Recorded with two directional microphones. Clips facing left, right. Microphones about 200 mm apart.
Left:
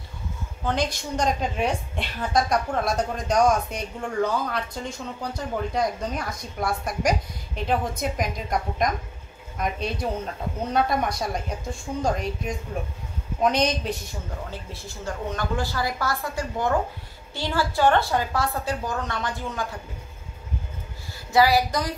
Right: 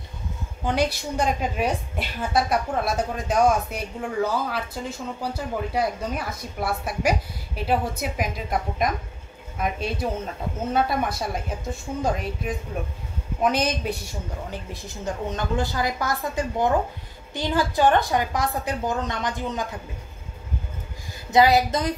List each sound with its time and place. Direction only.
0.7 s a woman's voice: 10° right (ahead or behind)
14.5 s a woman's voice: 20° right (ahead or behind)
21.3 s a woman's voice: 20° right (ahead or behind)